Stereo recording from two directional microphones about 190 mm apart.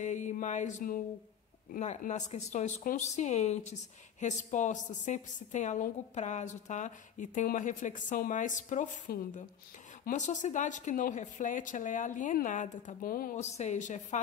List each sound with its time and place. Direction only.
0.0 s mantra: 40° left (ahead or behind)
1.7 s a woman's voice: 40° left (ahead or behind)